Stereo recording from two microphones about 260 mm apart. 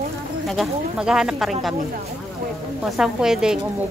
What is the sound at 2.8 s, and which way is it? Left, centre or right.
Speech, centre.